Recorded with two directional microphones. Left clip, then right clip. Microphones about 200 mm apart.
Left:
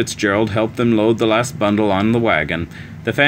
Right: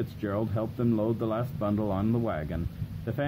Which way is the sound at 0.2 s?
25° left (ahead or behind).